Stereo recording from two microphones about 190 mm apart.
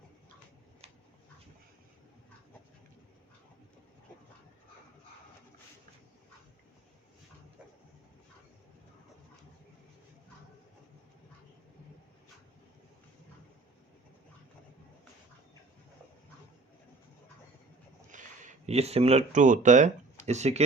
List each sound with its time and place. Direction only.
18.1 s speech: 40° right (ahead or behind)